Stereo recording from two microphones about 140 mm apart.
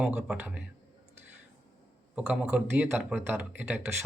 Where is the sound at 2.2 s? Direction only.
10° right (ahead or behind).